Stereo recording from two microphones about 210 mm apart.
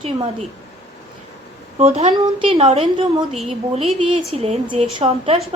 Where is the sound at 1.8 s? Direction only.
30° right (ahead or behind).